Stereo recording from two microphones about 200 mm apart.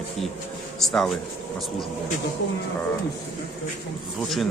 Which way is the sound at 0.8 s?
Centre (ahead or behind).